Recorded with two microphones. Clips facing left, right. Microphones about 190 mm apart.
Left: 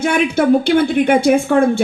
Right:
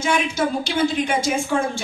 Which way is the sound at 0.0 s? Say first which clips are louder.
Left 7 dB; 60° left (ahead or behind).